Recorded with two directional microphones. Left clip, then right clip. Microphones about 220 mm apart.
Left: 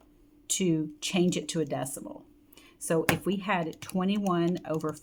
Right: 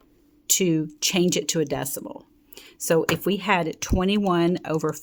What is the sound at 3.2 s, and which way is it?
Speech, 50° right (ahead or behind).